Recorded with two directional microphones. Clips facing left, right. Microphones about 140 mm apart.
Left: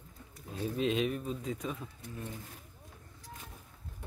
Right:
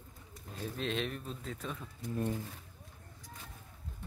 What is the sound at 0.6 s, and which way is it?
Speech, 5° left (ahead or behind).